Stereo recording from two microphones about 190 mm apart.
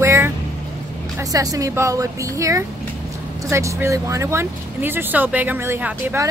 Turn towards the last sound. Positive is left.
turn(degrees=-10)  # may be behind; listen again after turning